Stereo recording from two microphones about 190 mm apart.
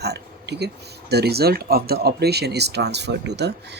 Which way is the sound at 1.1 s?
60° right (ahead or behind).